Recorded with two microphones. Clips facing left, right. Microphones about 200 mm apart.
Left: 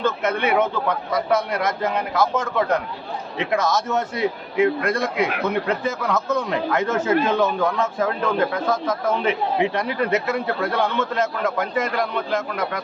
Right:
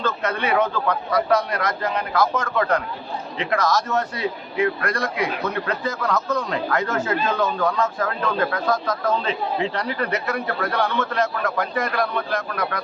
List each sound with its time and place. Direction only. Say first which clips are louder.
0.0 s speech: left 3 dB; 20° left (ahead or behind)